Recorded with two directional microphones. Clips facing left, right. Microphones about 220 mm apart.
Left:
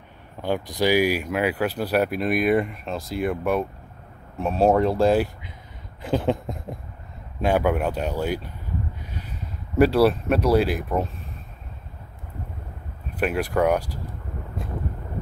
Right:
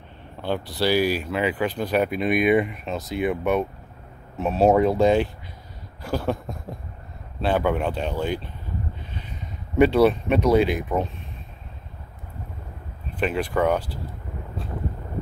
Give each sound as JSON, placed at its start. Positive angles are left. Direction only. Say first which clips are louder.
{"t": 0.4, "sound": "speech", "louder": "left 1 dB", "side_deg": 15}
{"t": 6.0, "sound": "a sound", "louder": "left 3 dB", "side_deg": 20}
{"t": 7.4, "sound": "speech", "louder": "left 1 dB", "side_deg": 10}
{"t": 9.8, "sound": "speech", "louder": "right 1 dB", "side_deg": 0}
{"t": 13.2, "sound": "speech", "louder": "left 1 dB", "side_deg": 10}